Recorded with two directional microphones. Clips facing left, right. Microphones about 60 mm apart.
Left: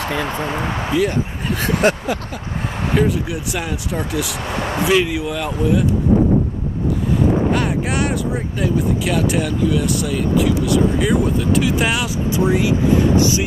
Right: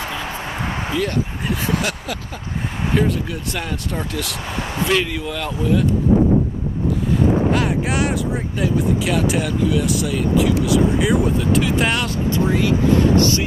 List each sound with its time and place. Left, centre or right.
0.0 s a sound: left
0.9 s speech: centre
1.8 s vehicle: left
3.0 s speech: centre
7.5 s speech: centre